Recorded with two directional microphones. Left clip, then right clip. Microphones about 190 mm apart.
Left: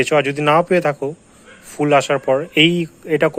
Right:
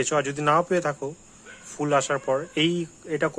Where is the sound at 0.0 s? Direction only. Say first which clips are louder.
Left 8 dB; 5° left (ahead or behind).